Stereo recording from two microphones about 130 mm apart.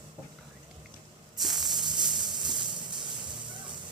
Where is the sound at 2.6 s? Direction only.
35° right (ahead or behind).